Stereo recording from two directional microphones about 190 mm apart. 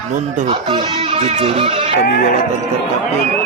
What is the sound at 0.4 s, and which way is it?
Speech, 25° right (ahead or behind).